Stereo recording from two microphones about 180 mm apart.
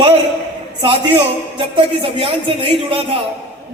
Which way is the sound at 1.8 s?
30° right (ahead or behind).